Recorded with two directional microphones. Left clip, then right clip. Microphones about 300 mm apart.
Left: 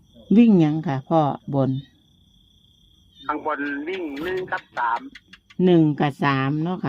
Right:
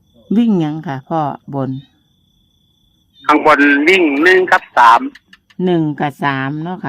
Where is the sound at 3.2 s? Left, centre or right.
Right.